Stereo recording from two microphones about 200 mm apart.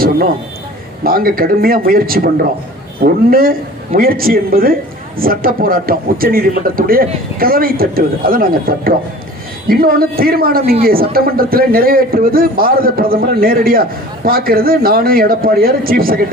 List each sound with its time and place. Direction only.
1.0 s speech: 45° right (ahead or behind)